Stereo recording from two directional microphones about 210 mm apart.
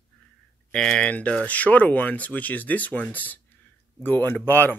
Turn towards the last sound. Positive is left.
turn(degrees=10)  # may be behind; listen again after turning